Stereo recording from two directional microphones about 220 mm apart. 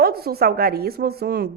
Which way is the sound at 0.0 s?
45° right (ahead or behind).